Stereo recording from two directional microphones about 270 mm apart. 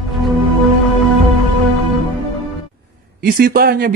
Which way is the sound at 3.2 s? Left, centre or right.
Right.